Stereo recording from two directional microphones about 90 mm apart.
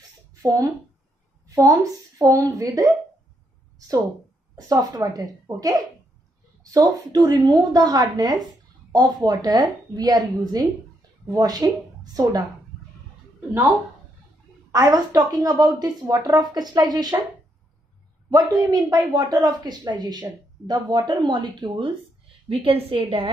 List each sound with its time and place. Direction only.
0.3 s a sound: 40° right (ahead or behind)
1.5 s a woman's voice: 40° right (ahead or behind)
3.7 s a sound: 40° right (ahead or behind)
4.6 s speech: 45° right (ahead or behind)
14.7 s speech: 40° right (ahead or behind)
18.7 s speech: 45° right (ahead or behind); by 21.9 s 60° right (ahead or behind)
22.5 s a woman's voice: 90° right